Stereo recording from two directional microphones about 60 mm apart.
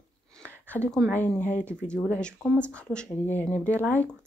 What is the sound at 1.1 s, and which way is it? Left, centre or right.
Speech, left.